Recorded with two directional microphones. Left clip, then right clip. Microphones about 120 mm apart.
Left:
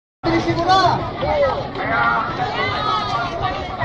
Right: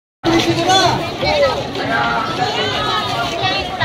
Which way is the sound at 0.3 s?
20° right (ahead or behind).